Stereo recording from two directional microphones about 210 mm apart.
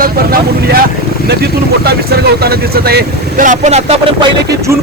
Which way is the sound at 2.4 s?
50° right (ahead or behind).